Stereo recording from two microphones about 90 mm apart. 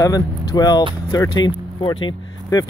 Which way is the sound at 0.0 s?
45° left (ahead or behind).